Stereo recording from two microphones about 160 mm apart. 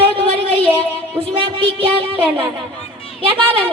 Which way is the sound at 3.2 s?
35° right (ahead or behind).